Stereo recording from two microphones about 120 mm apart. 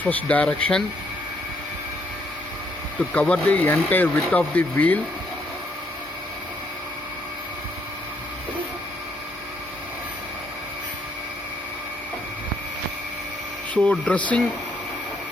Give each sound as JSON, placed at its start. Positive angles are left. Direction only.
{"t": 0.0, "sound": "speech", "side_deg": 15}
{"t": 3.1, "sound": "speech", "side_deg": 10}
{"t": 13.9, "sound": "speech", "side_deg": 10}